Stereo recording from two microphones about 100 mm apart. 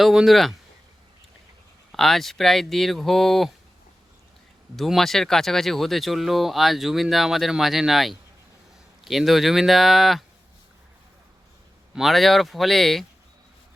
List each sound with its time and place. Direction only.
0.0 s speech: 5° right (ahead or behind)
1.9 s speech: 5° left (ahead or behind)
4.8 s speech: centre (ahead or behind)
11.9 s speech: centre (ahead or behind)